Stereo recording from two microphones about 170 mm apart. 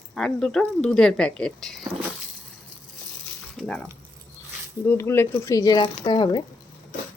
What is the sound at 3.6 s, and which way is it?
Speech, 5° left (ahead or behind).